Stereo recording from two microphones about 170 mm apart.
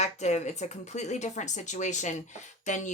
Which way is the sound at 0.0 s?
40° left (ahead or behind).